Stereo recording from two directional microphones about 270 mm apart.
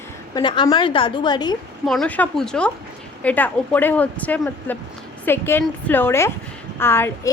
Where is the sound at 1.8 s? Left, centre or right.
Centre.